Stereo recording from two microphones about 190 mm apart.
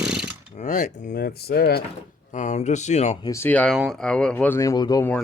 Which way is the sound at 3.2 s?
15° left (ahead or behind).